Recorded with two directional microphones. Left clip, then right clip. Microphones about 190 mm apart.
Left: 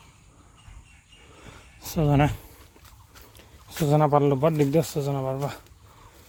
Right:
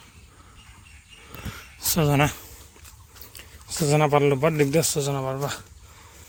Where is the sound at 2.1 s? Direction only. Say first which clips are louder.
Left 2 dB; 15° left (ahead or behind).